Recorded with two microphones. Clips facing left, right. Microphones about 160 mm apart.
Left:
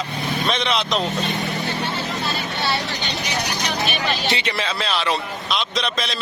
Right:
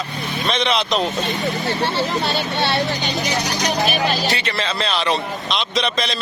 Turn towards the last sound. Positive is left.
turn(degrees=0)  # may be behind; listen again after turning